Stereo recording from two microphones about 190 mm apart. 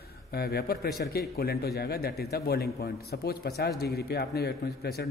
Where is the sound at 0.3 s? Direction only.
55° left (ahead or behind).